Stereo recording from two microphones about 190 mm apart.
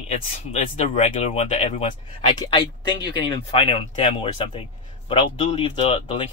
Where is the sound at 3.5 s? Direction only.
30° left (ahead or behind).